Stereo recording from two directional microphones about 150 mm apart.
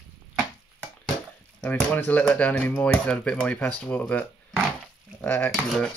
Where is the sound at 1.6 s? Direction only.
10° left (ahead or behind).